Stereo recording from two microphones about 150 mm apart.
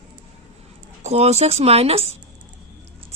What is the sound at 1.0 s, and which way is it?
A woman's voice, 45° right (ahead or behind).